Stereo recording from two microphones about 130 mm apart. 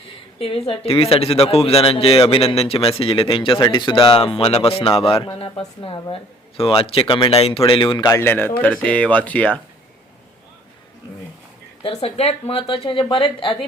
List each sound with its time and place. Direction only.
0.3 s speech: 45° left (ahead or behind)
8.2 s speech: 15° left (ahead or behind)
11.8 s speech: 50° left (ahead or behind)